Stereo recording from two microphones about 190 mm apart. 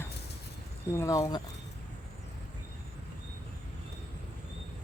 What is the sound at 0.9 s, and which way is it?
Speech, 15° left (ahead or behind).